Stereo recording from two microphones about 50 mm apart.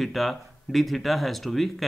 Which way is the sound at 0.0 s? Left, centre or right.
Centre.